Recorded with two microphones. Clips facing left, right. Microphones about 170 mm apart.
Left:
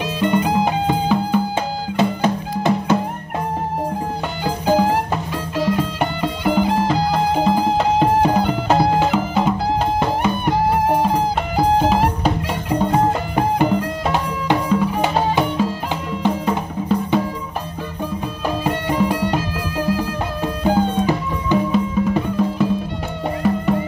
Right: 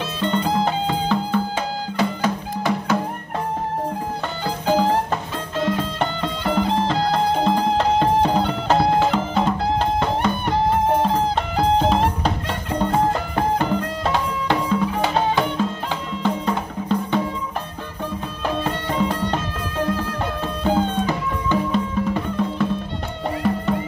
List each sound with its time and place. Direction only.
0.0 s music: 10° left (ahead or behind)
2.0 s music: 25° left (ahead or behind)
4.5 s music: 10° left (ahead or behind)
18.6 s music: 10° left (ahead or behind)
20.6 s music: 10° left (ahead or behind)